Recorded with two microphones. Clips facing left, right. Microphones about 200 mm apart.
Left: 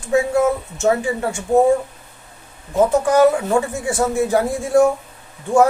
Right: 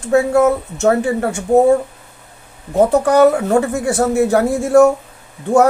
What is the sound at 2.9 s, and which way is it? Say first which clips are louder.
Speech: right 3 dB; 65° right (ahead or behind).